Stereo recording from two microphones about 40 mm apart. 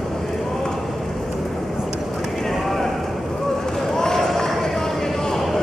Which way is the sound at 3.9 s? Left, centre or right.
Centre.